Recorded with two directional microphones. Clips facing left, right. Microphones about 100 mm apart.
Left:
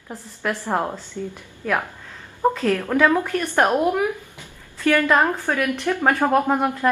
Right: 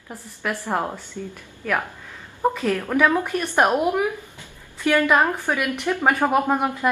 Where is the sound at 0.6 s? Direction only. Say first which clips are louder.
Left 1 dB; 10° left (ahead or behind).